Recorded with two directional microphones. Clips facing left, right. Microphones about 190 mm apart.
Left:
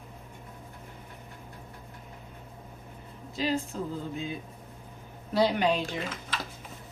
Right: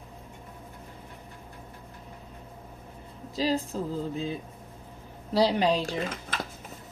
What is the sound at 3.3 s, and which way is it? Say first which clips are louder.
Speech: right 2 dB; 35° right (ahead or behind).